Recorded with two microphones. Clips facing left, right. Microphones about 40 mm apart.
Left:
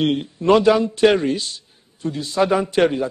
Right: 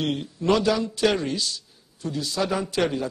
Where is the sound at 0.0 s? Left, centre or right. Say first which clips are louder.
Left 6 dB; left.